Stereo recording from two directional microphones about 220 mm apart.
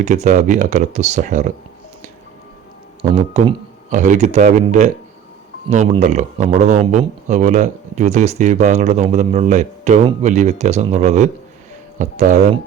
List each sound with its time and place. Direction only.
0.0 s speech: 30° right (ahead or behind)
3.0 s speech: 25° right (ahead or behind)